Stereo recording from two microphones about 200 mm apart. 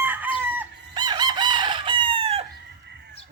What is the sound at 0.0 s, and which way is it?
Chicken, 10° right (ahead or behind).